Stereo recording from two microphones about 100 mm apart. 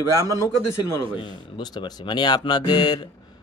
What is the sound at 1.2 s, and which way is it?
Speech, 45° left (ahead or behind).